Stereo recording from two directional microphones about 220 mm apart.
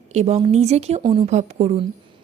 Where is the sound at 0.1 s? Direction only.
30° right (ahead or behind).